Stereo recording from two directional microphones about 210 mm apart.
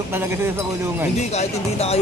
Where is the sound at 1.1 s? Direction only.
30° left (ahead or behind).